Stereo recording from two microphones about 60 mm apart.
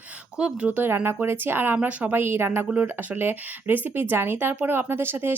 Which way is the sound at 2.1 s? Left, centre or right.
Right.